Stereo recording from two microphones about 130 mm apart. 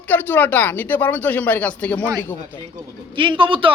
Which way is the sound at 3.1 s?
40° right (ahead or behind).